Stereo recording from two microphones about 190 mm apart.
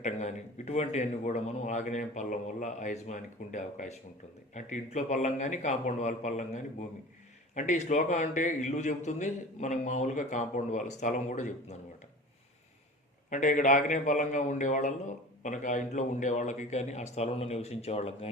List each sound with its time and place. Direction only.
0.0 s a man's voice: 35° left (ahead or behind)
13.3 s a man's voice: 40° left (ahead or behind)